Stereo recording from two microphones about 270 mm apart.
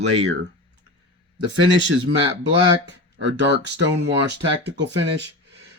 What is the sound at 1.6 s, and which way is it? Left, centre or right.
Speech, right.